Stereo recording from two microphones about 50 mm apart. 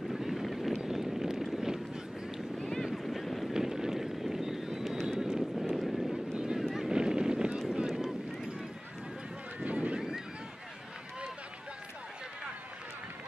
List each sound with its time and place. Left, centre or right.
0.1 s vehicle: centre
2.8 s boat: centre
3.5 s vehicle: centre
6.9 s boat: centre
7.8 s vehicle: centre
9.6 s a sound: right
9.9 s a sound: centre